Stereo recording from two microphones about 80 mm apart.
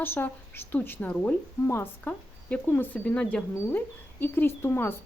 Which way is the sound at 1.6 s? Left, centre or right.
Left.